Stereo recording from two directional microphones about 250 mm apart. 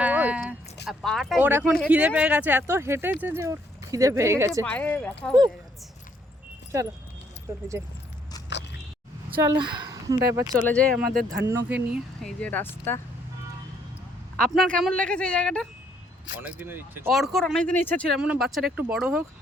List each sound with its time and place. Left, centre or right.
0.0 s a sound: centre
0.9 s speech: centre
4.6 s speech: centre
6.7 s speech: centre
9.4 s speech: centre
10.6 s speech: centre
11.0 s speech: right
11.4 s speech: centre
12.2 s speech: centre
14.3 s speech: centre